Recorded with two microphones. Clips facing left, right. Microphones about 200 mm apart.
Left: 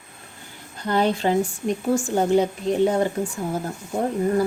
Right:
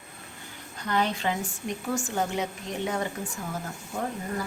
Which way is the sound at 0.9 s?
30° left (ahead or behind).